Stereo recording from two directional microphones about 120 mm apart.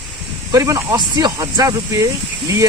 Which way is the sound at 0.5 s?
30° right (ahead or behind).